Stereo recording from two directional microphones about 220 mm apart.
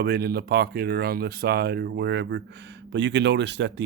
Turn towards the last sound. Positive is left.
turn(degrees=-50)  # may be behind; listen again after turning